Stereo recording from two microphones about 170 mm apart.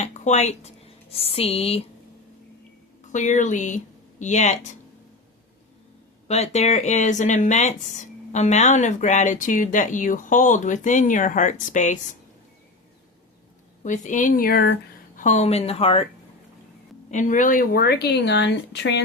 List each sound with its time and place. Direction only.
0.0 s speech: 45° left (ahead or behind)
3.1 s speech: 45° left (ahead or behind)
6.2 s speech: 40° left (ahead or behind)
13.8 s speech: 45° left (ahead or behind); by 15.2 s 65° left (ahead or behind)
15.2 s speech: 45° left (ahead or behind)
17.1 s speech: 45° left (ahead or behind); by 19.0 s 90° left